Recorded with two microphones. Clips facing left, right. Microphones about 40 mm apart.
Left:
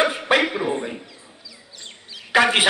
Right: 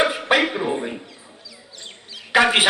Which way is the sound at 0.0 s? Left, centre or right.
Centre.